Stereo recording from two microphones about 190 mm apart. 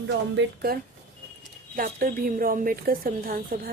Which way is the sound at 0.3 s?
55° right (ahead or behind).